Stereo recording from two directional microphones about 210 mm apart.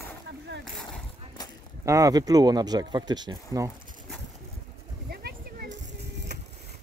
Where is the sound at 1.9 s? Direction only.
15° right (ahead or behind).